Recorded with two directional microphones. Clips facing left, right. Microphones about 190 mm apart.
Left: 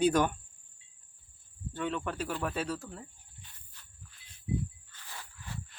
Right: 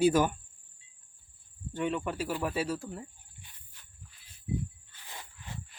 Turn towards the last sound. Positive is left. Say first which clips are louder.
# even
turn(degrees=-20)  # may be behind; listen again after turning